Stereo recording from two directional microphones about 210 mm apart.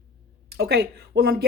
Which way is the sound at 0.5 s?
50° right (ahead or behind).